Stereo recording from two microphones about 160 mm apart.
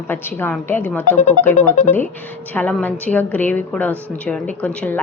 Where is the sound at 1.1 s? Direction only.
55° left (ahead or behind).